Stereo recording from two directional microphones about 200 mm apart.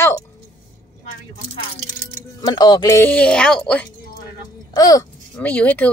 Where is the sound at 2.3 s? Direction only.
20° left (ahead or behind); by 3.8 s 5° left (ahead or behind).